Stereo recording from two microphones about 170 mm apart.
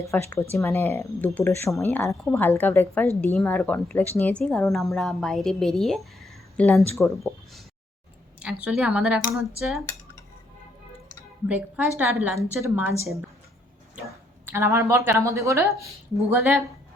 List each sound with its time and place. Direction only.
0.0 s a woman's voice: 15° left (ahead or behind)
7.2 s a woman's voice: centre (ahead or behind)
11.4 s a woman's voice: 10° right (ahead or behind)
14.4 s a woman's voice: 15° right (ahead or behind)